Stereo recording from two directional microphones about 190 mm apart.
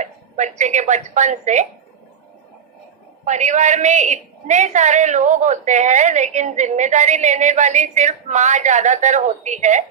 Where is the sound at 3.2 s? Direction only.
40° right (ahead or behind).